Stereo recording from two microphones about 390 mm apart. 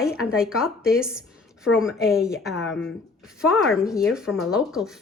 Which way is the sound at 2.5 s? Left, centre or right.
Left.